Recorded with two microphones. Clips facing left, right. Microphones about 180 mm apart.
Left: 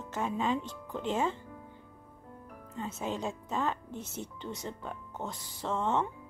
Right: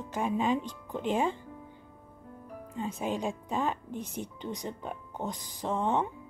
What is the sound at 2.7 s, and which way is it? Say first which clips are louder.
Speech: right 3 dB; 15° right (ahead or behind).